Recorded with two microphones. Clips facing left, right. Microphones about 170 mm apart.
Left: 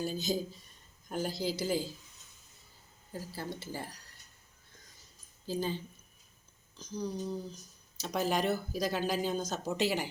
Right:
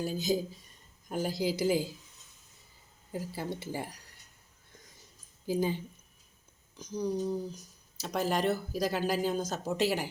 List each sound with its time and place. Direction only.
0.0 s speech: 10° right (ahead or behind)
3.1 s speech: 15° right (ahead or behind)
5.5 s speech: 15° right (ahead or behind)
8.0 s speech: centre (ahead or behind)